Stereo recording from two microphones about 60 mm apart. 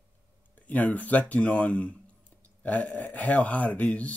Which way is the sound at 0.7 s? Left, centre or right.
Left.